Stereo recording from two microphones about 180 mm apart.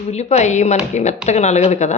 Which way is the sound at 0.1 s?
40° left (ahead or behind).